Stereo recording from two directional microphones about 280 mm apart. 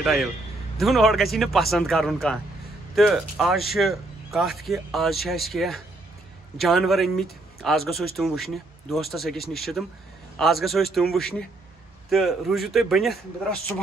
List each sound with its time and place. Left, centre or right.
0.0 s speech: centre